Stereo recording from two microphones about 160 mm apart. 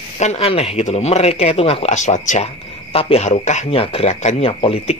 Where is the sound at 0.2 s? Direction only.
40° left (ahead or behind).